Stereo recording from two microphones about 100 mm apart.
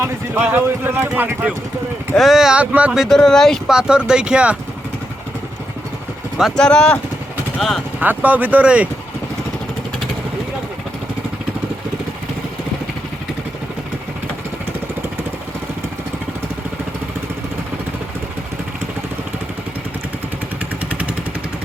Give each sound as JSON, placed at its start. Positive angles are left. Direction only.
{"t": 0.0, "sound": "speech", "side_deg": -20}
{"t": 2.1, "sound": "speech", "side_deg": 0}
{"t": 3.1, "sound": "speech", "side_deg": 5}
{"t": 3.7, "sound": "speech", "side_deg": -10}
{"t": 6.6, "sound": "speech", "side_deg": 10}
{"t": 7.9, "sound": "speech", "side_deg": -15}